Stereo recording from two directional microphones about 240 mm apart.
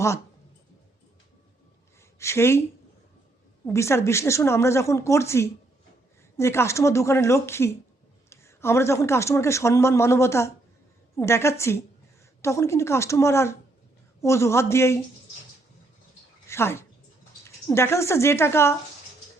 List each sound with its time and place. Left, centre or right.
2.1 s speech: centre
3.7 s a woman's voice: centre
16.5 s a sound: centre
17.4 s speech: centre